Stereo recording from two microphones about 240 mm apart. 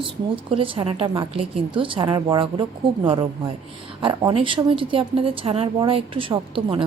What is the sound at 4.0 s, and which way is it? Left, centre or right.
A woman's voice, right.